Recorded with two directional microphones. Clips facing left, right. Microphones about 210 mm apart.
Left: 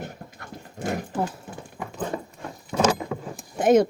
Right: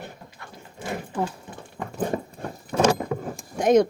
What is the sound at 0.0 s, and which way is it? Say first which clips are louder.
Clip-clop: left 3 dB; 50° left (ahead or behind).